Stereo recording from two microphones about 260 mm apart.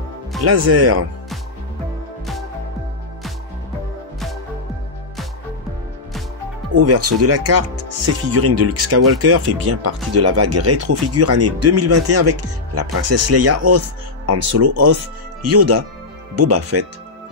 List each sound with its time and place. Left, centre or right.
0.4 s speech: right
6.7 s speech: right